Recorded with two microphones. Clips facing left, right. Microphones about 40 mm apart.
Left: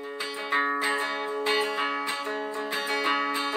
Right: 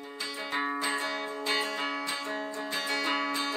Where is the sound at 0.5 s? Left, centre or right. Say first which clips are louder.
Left 6 dB; left.